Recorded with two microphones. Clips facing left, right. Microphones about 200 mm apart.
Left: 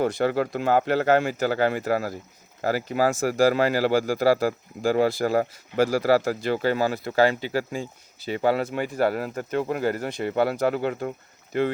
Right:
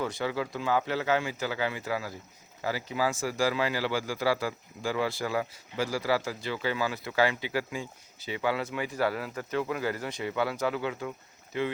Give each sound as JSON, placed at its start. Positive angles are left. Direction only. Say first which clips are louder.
{"t": 0.0, "sound": "speech", "louder": "left 8 dB", "side_deg": 55}
{"t": 8.8, "sound": "speech", "louder": "left 6 dB", "side_deg": 55}